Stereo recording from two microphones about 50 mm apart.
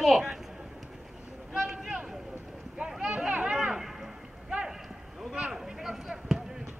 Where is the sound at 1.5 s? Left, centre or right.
Centre.